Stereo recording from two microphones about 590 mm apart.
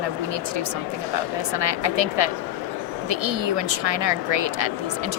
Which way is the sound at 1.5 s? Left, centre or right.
Right.